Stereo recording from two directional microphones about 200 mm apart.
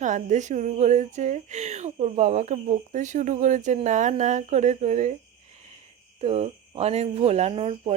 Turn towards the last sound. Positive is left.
turn(degrees=-30)  # may be behind; listen again after turning